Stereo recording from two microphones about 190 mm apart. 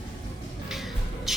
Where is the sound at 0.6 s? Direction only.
Centre (ahead or behind).